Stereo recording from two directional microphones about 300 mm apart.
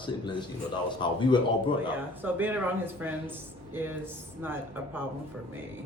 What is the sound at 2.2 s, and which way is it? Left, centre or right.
Speech, centre.